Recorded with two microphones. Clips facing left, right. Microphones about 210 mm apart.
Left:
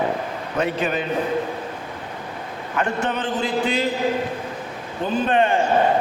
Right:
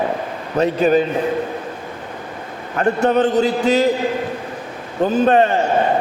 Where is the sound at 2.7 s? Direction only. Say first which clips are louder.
Right 8 dB; 40° right (ahead or behind).